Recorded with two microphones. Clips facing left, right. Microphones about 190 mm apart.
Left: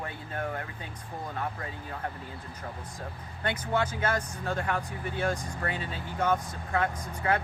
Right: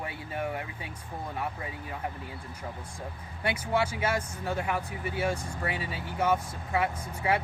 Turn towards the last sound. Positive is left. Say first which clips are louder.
# even
turn(degrees=-10)  # may be behind; listen again after turning